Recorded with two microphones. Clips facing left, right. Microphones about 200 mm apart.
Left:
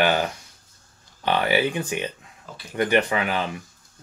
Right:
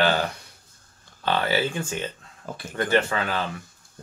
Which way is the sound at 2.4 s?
50° right (ahead or behind).